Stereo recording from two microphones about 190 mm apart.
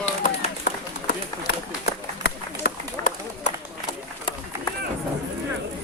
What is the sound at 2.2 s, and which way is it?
Run, 50° left (ahead or behind).